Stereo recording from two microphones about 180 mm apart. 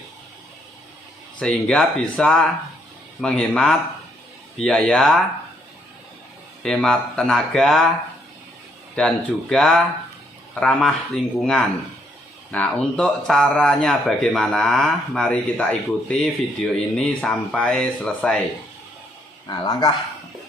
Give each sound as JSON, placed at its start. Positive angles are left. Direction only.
{"t": 1.4, "sound": "speech", "side_deg": 5}
{"t": 6.6, "sound": "speech", "side_deg": 5}
{"t": 9.0, "sound": "speech", "side_deg": 5}
{"t": 12.5, "sound": "speech", "side_deg": 5}
{"t": 19.5, "sound": "speech", "side_deg": 25}